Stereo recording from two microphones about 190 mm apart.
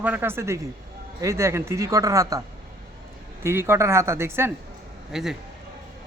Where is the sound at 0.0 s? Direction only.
10° right (ahead or behind).